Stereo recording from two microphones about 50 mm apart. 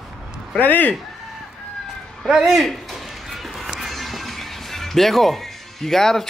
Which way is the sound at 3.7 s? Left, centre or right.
Centre.